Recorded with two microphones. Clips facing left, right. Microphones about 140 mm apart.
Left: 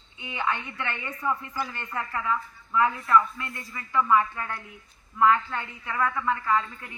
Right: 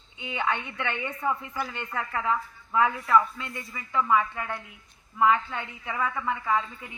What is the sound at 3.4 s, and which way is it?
Speech, 20° right (ahead or behind).